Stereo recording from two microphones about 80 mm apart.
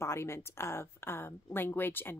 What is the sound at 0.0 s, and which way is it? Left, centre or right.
A woman's voice, left.